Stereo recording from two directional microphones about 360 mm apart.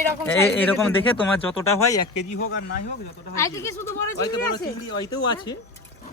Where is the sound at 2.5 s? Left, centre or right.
Left.